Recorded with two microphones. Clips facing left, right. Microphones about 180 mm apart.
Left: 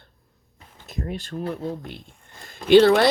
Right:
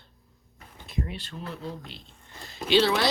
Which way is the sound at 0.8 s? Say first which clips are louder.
Left 3 dB; 45° left (ahead or behind).